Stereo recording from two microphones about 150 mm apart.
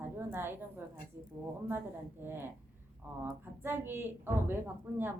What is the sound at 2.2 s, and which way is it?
A woman's voice, 15° right (ahead or behind).